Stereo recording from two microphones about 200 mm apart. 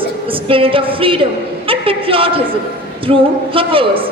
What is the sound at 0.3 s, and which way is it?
A woman's voice, 25° right (ahead or behind).